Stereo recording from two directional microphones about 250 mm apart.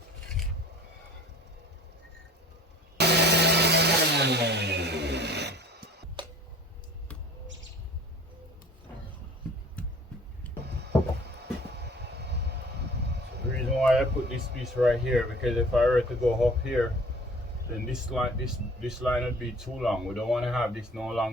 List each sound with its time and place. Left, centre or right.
3.0 s vehicle: right
6.2 s tick-tock: centre
11.8 s vehicle: right
13.7 s a sound: centre
14.6 s speech: centre
18.1 s speech: centre